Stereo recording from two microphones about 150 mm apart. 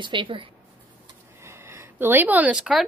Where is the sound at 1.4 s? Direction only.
15° right (ahead or behind).